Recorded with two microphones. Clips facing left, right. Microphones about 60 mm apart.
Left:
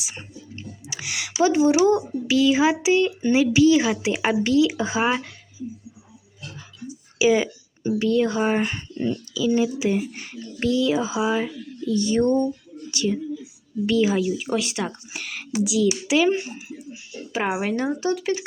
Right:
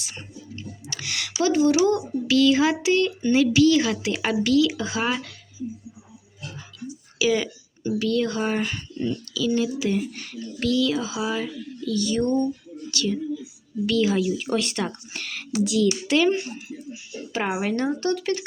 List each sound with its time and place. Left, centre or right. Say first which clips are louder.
0.0 s speech: left 1 dB; centre
0.6 s a sound: left 1 dB; centre
2.8 s speech: left 2 dB; centre
6.8 s speech: left 4 dB; centre